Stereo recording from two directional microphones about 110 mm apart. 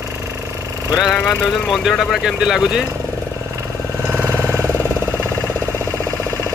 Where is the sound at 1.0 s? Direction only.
5° left (ahead or behind).